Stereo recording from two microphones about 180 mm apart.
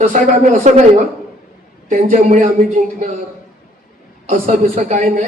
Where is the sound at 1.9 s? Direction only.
45° right (ahead or behind).